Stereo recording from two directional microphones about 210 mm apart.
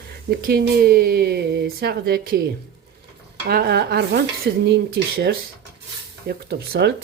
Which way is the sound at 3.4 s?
50° right (ahead or behind).